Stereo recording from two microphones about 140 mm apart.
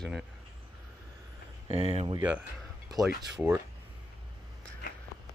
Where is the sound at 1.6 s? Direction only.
45° right (ahead or behind).